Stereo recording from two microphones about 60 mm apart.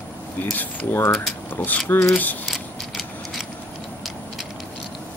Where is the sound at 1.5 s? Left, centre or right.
Left.